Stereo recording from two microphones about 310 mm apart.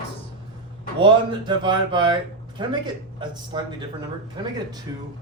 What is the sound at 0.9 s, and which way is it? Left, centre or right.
Speech, centre.